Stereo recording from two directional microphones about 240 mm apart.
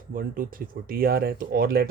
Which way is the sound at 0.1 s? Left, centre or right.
Right.